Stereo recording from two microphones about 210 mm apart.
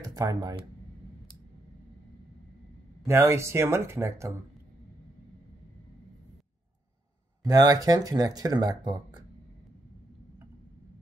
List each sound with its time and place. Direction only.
0.0 s speech: 15° right (ahead or behind)
3.1 s speech: 15° right (ahead or behind)
7.4 s speech: 15° right (ahead or behind)